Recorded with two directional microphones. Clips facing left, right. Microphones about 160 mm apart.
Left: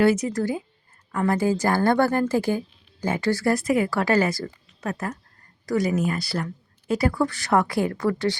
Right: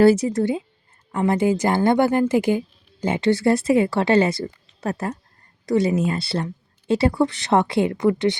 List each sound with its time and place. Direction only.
0.0 s speech: 30° right (ahead or behind)